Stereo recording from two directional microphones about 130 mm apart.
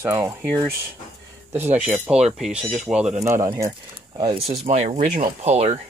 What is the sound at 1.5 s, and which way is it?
Speech, 15° right (ahead or behind).